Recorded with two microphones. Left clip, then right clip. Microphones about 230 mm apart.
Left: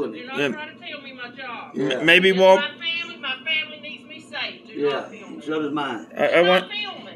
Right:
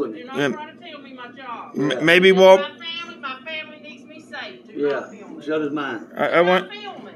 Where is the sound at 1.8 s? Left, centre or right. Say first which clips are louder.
Right 1 dB; right.